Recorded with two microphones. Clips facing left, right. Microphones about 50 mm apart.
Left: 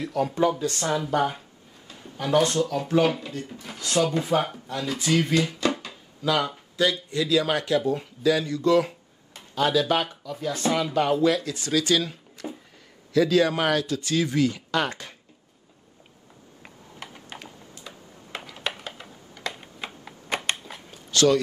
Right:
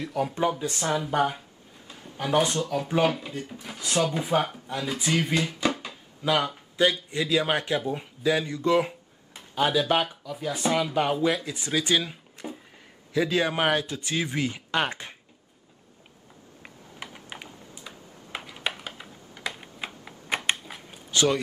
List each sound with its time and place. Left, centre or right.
0.0 s speech: centre
3.3 s speech: centre
16.6 s a sound: centre